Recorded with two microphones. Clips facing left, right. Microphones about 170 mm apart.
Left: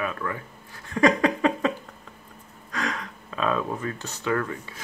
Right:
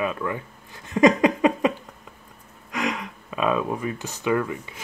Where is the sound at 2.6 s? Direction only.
15° right (ahead or behind).